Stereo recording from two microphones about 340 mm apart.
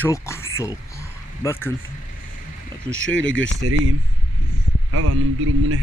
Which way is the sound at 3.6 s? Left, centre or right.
Right.